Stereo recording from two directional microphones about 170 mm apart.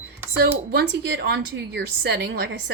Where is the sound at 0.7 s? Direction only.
75° right (ahead or behind).